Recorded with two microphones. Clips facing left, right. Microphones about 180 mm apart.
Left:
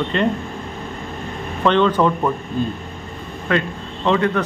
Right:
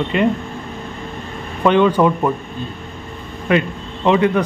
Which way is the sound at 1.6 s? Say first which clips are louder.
Right 3 dB; 10° right (ahead or behind).